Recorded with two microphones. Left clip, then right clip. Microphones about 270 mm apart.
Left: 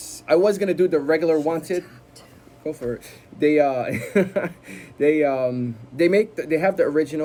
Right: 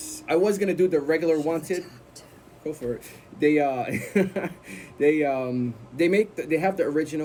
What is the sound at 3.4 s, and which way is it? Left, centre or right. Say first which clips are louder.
Speech: left 4 dB; centre.